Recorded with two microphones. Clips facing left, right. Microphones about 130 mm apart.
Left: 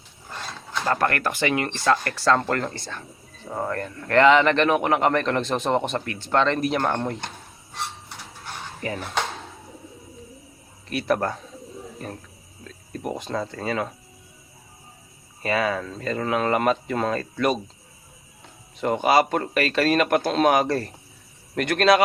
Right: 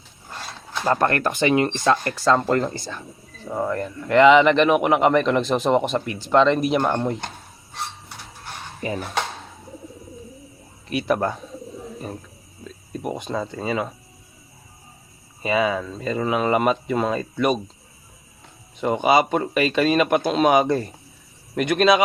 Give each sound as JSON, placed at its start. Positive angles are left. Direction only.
{"t": 0.9, "sound": "a man's voice", "side_deg": -25}
{"t": 8.8, "sound": "speech", "side_deg": -20}
{"t": 10.8, "sound": "speech", "side_deg": -5}
{"t": 12.6, "sound": "a man's voice", "side_deg": -5}
{"t": 15.4, "sound": "a man's voice", "side_deg": -5}
{"t": 18.8, "sound": "a man's voice", "side_deg": -5}